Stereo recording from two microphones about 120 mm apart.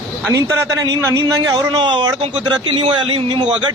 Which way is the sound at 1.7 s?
40° right (ahead or behind).